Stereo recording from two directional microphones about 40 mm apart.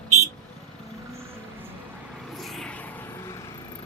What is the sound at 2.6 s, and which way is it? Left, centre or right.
Vehicle, left.